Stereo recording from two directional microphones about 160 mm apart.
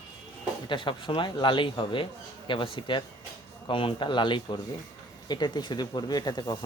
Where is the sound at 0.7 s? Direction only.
30° left (ahead or behind).